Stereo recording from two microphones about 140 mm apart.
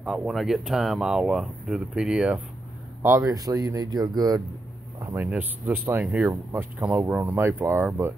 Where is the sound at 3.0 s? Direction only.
20° right (ahead or behind).